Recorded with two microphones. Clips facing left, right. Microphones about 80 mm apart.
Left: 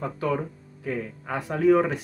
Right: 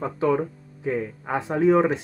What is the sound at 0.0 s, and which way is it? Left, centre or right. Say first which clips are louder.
Speech: right 4 dB; right.